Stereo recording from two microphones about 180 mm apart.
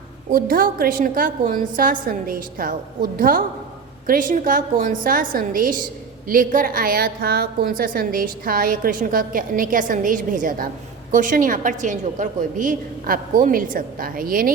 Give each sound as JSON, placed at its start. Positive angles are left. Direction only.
{"t": 0.3, "sound": "a woman's voice", "side_deg": -55}